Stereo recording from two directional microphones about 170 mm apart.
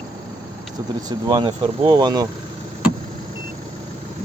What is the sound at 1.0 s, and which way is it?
Speech, 25° right (ahead or behind).